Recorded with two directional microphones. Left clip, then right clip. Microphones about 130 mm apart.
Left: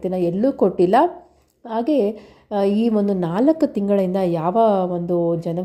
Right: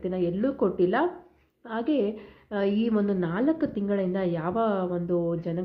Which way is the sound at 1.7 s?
45° left (ahead or behind).